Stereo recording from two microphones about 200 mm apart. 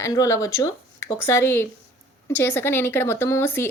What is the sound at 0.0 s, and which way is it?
Speech, 15° left (ahead or behind).